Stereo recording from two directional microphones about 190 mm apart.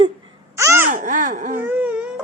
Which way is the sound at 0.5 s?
15° right (ahead or behind).